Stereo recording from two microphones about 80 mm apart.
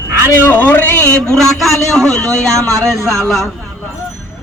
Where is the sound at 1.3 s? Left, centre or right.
Centre.